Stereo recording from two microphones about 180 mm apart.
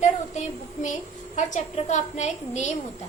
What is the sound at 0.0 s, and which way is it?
Child singing, 40° left (ahead or behind).